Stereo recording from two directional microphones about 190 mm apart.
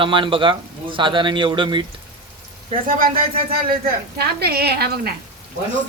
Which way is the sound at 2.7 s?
45° right (ahead or behind).